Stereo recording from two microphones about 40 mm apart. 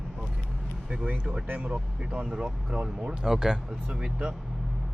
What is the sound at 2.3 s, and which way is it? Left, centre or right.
Speech, right.